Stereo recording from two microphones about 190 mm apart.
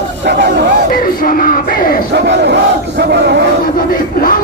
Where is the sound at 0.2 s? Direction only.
60° right (ahead or behind).